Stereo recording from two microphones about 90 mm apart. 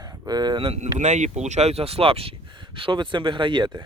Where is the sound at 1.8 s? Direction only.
90° right.